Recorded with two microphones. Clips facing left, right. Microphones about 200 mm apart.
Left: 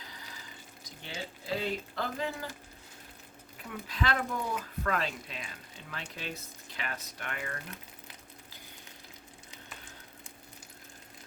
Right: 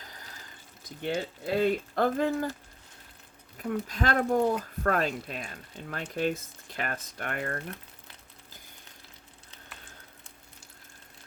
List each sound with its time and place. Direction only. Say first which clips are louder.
0.1 s water: even; 45° right (ahead or behind)
1.0 s speech: right 9 dB; 55° right (ahead or behind)
3.6 s speech: right 6 dB; 45° right (ahead or behind)